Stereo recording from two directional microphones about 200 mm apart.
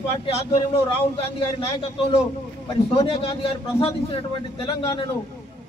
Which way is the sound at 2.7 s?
30° left (ahead or behind).